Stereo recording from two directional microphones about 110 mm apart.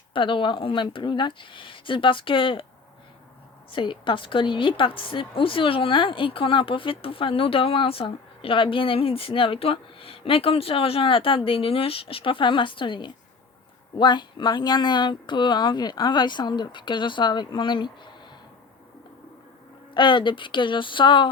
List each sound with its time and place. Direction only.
0.1 s a woman's voice: 50° left (ahead or behind)
3.7 s a woman's voice: 50° left (ahead or behind)
19.9 s a woman's voice: 45° left (ahead or behind)